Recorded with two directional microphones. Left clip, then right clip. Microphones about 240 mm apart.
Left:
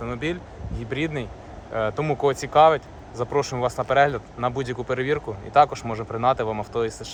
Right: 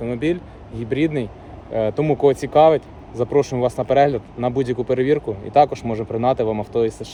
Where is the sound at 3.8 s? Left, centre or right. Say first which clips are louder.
Right 3 dB; left.